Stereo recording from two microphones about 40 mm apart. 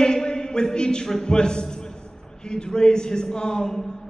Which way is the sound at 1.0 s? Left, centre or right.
Centre.